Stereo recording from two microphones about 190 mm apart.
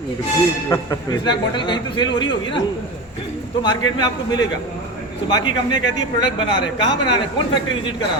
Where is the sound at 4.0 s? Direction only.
20° left (ahead or behind).